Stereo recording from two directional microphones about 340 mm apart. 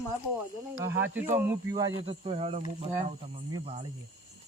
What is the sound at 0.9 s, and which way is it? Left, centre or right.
Speech, right.